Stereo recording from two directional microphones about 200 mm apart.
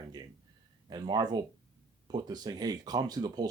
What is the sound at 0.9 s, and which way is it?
Speech, 20° right (ahead or behind).